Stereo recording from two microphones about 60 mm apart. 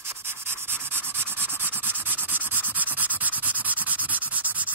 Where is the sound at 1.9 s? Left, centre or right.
Right.